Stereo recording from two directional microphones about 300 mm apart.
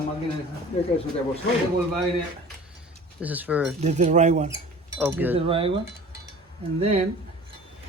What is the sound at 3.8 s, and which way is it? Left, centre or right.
Speech, right.